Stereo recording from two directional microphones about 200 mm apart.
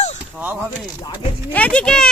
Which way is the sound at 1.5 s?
5° left (ahead or behind).